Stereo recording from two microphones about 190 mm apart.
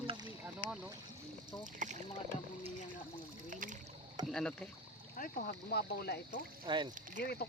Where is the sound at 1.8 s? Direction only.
40° right (ahead or behind).